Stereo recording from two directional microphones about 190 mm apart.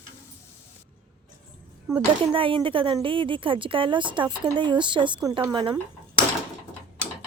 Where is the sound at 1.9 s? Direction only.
25° right (ahead or behind).